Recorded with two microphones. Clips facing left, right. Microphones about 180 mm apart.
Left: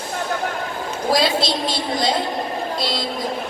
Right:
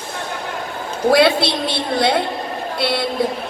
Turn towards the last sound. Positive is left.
turn(degrees=-65)  # may be behind; listen again after turning